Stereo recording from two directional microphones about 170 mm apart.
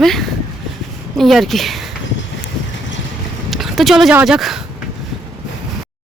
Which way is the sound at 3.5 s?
Centre (ahead or behind).